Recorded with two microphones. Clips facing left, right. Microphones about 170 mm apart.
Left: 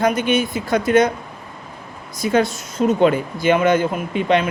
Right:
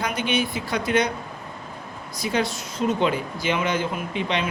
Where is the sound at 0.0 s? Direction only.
45° left (ahead or behind).